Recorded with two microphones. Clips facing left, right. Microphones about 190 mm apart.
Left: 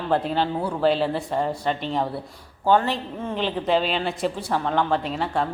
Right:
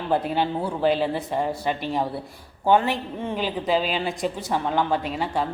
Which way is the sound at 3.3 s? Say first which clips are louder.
Left 1 dB; 5° right (ahead or behind).